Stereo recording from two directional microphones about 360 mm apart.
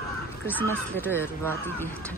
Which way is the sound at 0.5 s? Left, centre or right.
Centre.